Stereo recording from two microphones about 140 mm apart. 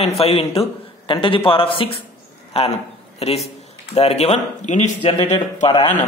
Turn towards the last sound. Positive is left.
turn(degrees=45)  # may be behind; listen again after turning